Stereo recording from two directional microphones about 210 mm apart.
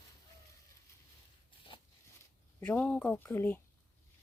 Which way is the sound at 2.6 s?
5° left (ahead or behind).